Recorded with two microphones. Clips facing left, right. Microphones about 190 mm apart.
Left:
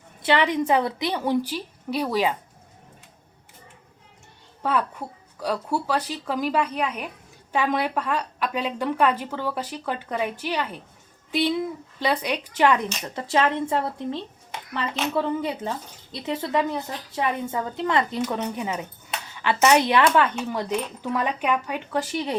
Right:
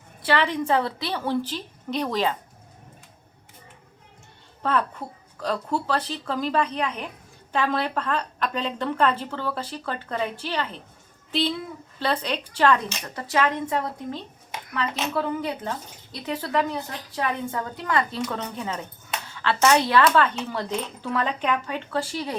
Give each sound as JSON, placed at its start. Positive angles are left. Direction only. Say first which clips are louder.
{"t": 0.2, "sound": "a woman's voice", "louder": "left 2 dB", "side_deg": 20}
{"t": 4.6, "sound": "a woman's voice", "louder": "even", "side_deg": 10}